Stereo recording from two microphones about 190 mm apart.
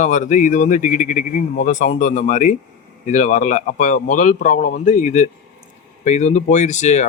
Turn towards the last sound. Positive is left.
turn(degrees=40)  # may be behind; listen again after turning